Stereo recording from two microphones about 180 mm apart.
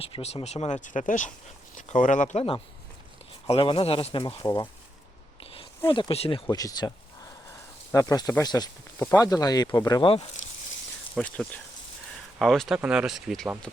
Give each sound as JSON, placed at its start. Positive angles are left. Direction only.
{"t": 0.0, "sound": "speech", "side_deg": 30}
{"t": 5.9, "sound": "speech", "side_deg": 30}
{"t": 7.9, "sound": "speech", "side_deg": 20}
{"t": 11.2, "sound": "speech", "side_deg": 5}
{"t": 12.4, "sound": "speech", "side_deg": 0}